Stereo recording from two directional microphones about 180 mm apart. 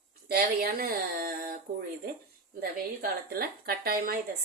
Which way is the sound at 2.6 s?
55° right (ahead or behind).